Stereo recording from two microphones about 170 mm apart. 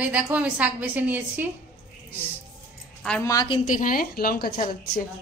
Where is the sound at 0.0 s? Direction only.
10° right (ahead or behind).